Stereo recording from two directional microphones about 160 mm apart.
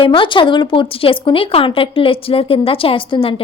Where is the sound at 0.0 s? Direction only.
30° left (ahead or behind).